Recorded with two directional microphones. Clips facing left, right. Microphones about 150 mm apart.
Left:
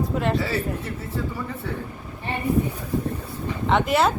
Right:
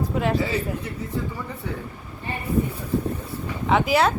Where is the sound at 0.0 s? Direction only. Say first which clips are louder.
Even; centre (ahead or behind).